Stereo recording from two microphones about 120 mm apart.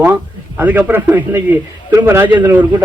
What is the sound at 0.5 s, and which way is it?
Speech, 15° right (ahead or behind).